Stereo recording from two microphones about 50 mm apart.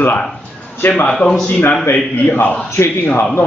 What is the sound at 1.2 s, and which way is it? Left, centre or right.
Speech, left.